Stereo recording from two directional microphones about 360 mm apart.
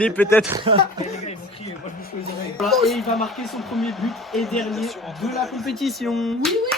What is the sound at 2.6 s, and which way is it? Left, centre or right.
Speech, centre.